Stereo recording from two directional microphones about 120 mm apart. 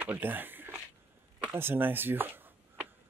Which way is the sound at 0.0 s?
15° right (ahead or behind).